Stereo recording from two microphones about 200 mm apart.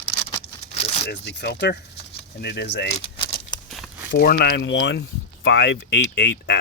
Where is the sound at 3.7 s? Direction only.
Centre (ahead or behind).